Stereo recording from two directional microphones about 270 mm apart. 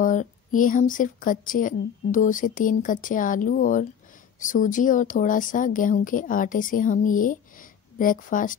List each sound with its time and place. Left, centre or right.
0.0 s speech: left